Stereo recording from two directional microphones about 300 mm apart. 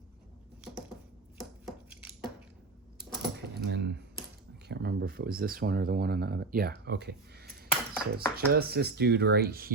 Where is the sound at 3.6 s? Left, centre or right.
Right.